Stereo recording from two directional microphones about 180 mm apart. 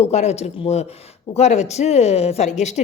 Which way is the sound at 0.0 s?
40° left (ahead or behind).